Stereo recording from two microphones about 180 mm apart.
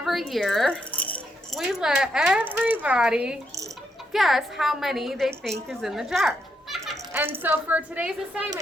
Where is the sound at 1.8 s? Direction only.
5° right (ahead or behind).